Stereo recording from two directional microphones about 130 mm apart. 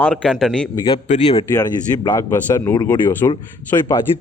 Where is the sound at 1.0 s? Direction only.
55° left (ahead or behind).